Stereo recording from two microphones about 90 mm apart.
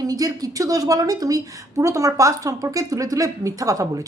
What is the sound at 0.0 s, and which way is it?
A woman's voice, 45° right (ahead or behind).